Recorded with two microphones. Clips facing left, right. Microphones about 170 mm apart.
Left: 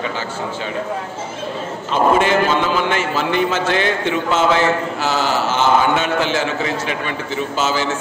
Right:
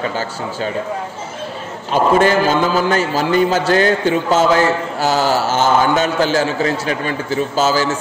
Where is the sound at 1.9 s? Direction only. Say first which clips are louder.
Right 2 dB; 35° right (ahead or behind).